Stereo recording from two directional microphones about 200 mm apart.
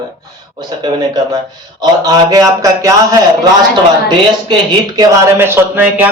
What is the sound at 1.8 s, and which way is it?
Speech, 20° right (ahead or behind).